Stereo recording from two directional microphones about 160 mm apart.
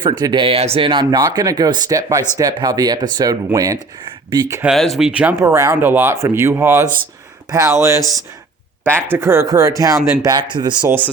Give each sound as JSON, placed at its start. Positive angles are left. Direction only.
{"t": 0.2, "sound": "speech", "side_deg": -25}
{"t": 4.7, "sound": "speech", "side_deg": 0}
{"t": 5.4, "sound": "speech", "side_deg": -20}
{"t": 10.8, "sound": "speech", "side_deg": -10}